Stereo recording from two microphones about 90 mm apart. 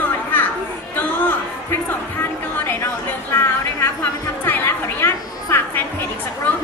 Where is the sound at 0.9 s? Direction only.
20° left (ahead or behind).